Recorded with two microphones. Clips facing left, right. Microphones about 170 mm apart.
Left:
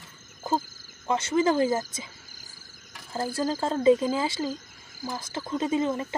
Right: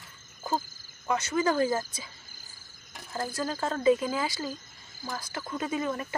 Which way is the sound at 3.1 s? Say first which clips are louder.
Left 4 dB; 30° left (ahead or behind).